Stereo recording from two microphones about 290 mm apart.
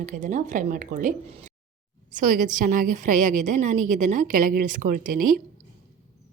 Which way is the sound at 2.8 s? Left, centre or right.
Right.